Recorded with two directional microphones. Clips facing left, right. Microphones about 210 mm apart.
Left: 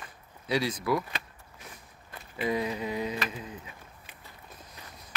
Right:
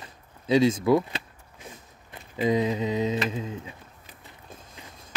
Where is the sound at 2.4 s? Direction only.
20° right (ahead or behind).